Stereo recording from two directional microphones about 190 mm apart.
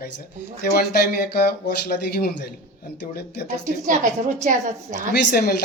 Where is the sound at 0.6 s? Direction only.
55° left (ahead or behind).